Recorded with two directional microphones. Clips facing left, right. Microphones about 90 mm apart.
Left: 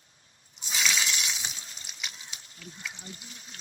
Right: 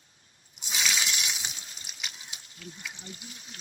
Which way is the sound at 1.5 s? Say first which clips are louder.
Left 1 dB; 35° left (ahead or behind).